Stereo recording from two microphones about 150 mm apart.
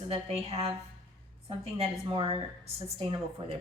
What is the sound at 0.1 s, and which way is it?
A woman's voice, 40° right (ahead or behind).